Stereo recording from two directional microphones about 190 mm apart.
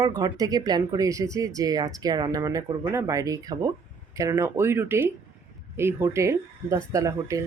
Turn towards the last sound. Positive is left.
turn(degrees=-15)  # may be behind; listen again after turning